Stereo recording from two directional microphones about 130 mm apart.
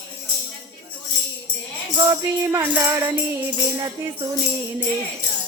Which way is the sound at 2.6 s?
20° right (ahead or behind).